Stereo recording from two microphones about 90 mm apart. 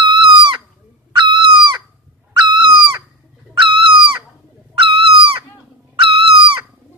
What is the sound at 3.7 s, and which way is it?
Chicken, 70° right (ahead or behind).